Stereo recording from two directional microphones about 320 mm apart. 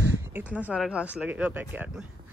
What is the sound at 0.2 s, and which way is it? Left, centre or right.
Speech, centre.